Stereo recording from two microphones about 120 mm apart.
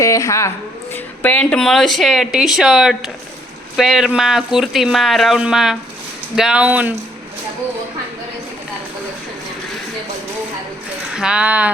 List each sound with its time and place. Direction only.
0.0 s a woman's voice: 25° left (ahead or behind)
0.9 s speech: 15° left (ahead or behind); by 6.9 s 15° right (ahead or behind)
11.1 s speech: 5° right (ahead or behind)